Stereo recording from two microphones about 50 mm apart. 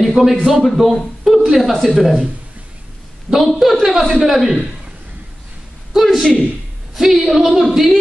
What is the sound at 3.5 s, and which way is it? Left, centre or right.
A man's voice, centre.